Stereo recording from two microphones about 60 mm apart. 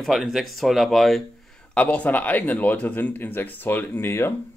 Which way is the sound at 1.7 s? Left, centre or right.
Left.